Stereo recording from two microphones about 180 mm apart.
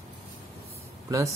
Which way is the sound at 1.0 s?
15° right (ahead or behind).